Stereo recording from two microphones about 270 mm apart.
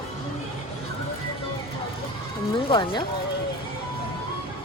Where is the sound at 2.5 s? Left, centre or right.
Centre.